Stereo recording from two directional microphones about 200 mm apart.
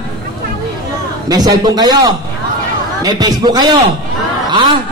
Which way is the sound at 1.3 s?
20° right (ahead or behind).